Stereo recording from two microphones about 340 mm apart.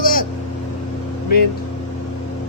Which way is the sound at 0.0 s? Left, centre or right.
Left.